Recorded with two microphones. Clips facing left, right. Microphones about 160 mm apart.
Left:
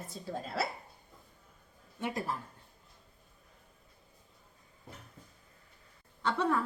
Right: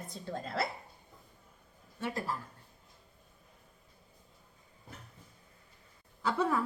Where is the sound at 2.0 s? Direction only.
20° left (ahead or behind).